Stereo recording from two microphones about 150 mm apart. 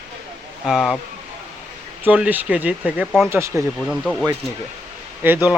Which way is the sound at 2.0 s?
10° right (ahead or behind).